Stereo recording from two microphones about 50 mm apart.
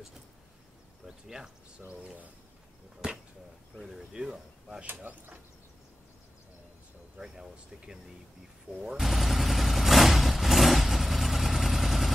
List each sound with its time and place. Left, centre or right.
1.0 s a sound: centre
1.9 s speech: right
3.7 s speech: centre
4.8 s speech: right
7.2 s speech: centre
8.7 s vehicle: centre